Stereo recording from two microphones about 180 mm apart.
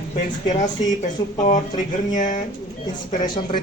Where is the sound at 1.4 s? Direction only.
40° left (ahead or behind).